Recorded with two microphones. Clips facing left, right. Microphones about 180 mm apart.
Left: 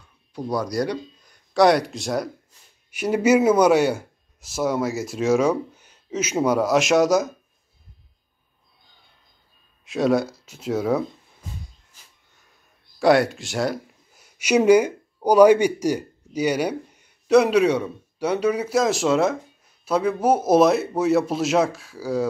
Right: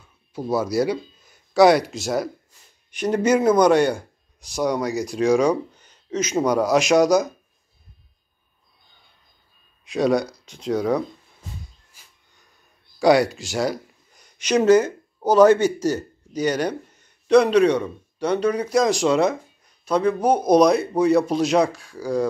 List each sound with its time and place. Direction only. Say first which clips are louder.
0.3 s a man's voice: right 3 dB; 5° right (ahead or behind)
9.8 s a man's voice: even; centre (ahead or behind)
13.0 s speech: right 1 dB; centre (ahead or behind)